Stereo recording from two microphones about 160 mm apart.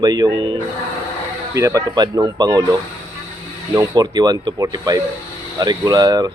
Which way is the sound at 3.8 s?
25° right (ahead or behind).